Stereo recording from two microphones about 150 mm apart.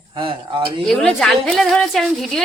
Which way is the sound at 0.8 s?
Centre (ahead or behind).